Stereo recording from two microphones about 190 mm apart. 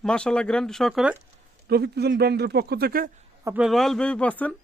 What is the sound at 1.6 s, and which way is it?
Speech, 60° right (ahead or behind).